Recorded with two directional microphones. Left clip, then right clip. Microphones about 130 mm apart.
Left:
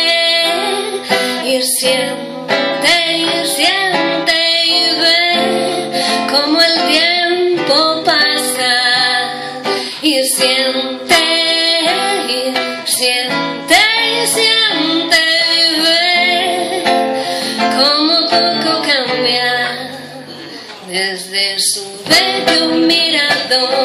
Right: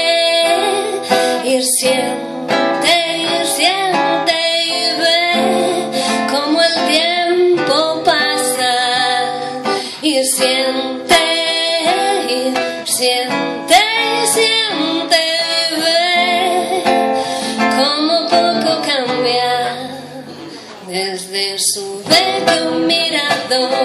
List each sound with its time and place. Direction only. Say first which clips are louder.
0.4 s music: right 1 dB; 40° right (ahead or behind)
22.1 s music: left 1 dB; 40° right (ahead or behind)